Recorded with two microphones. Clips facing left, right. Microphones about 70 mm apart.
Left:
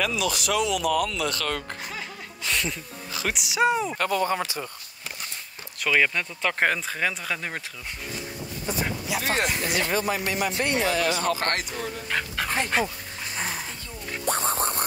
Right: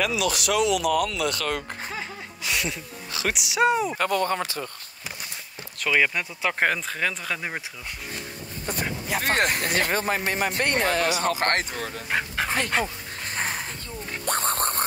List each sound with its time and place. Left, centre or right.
0.0 s speech: centre
5.9 s speech: centre
8.6 s speech: right
12.1 s dog: right
12.7 s speech: centre
13.3 s a sound: right
14.2 s music: right